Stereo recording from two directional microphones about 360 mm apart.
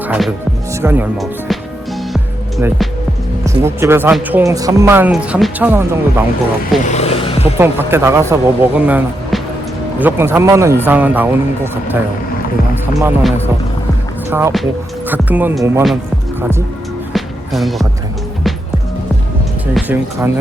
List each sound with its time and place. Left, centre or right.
0.1 s speech: centre
2.1 s music: centre
3.4 s speech: centre
6.8 s vehicle: centre
7.6 s speech: centre
13.0 s speech: centre
17.2 s music: centre
19.7 s speech: centre